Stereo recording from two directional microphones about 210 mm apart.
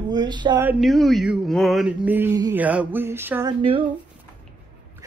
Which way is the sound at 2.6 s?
5° right (ahead or behind).